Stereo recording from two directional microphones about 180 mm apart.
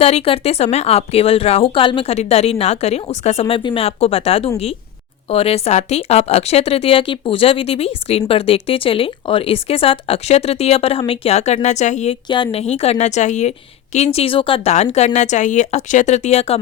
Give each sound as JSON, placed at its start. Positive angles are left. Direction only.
{"t": 0.0, "sound": "speech", "side_deg": 35}
{"t": 12.3, "sound": "speech", "side_deg": 30}